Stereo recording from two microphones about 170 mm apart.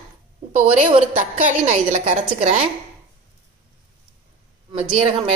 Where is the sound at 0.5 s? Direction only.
40° right (ahead or behind).